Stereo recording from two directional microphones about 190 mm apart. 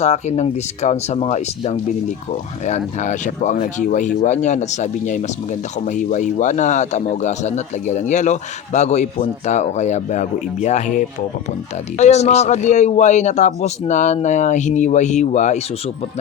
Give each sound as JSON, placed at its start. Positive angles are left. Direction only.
{"t": 0.0, "sound": "a man's voice", "side_deg": 35}